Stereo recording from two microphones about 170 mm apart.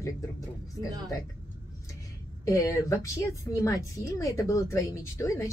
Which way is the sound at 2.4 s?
20° left (ahead or behind).